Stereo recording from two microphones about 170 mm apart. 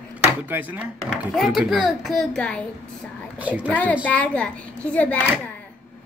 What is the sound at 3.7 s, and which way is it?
A child's voice, 10° left (ahead or behind).